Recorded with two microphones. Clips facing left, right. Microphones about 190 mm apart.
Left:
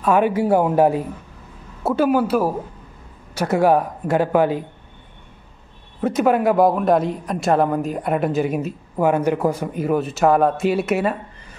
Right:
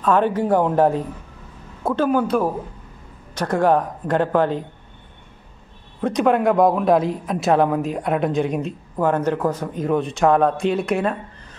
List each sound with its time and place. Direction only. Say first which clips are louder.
0.0 s speech: left 1 dB; 10° left (ahead or behind)
5.9 s speech: even; 5° left (ahead or behind)